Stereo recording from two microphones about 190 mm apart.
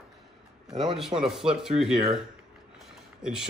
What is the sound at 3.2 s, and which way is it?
Speech, 5° right (ahead or behind).